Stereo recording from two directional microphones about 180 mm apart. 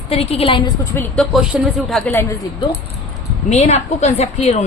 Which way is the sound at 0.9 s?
5° left (ahead or behind).